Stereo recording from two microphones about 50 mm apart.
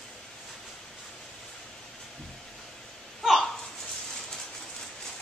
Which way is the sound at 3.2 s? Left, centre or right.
Centre.